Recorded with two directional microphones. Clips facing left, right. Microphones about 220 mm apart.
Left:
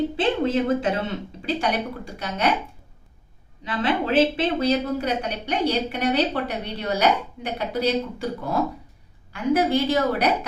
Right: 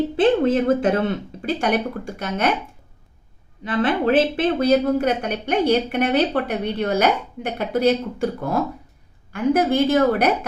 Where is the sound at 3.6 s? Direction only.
55° right (ahead or behind).